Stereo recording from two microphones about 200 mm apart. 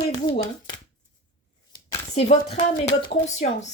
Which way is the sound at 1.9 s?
30° left (ahead or behind).